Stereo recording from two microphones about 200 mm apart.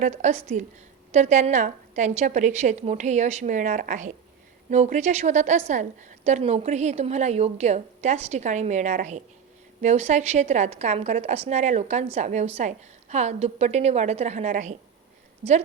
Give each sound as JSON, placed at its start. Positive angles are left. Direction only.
{"t": 0.0, "sound": "a woman's voice", "side_deg": -35}